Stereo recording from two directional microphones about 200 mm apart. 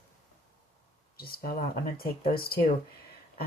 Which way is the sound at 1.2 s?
50° left (ahead or behind).